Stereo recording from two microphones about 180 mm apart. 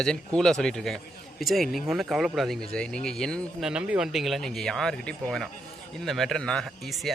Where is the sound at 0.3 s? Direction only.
5° left (ahead or behind).